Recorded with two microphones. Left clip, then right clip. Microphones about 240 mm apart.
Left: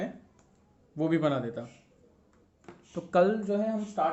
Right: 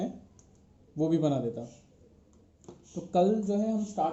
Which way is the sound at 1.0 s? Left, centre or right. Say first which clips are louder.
Even; centre.